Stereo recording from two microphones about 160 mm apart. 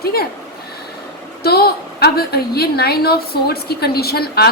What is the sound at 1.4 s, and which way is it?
A woman's voice, 75° left (ahead or behind).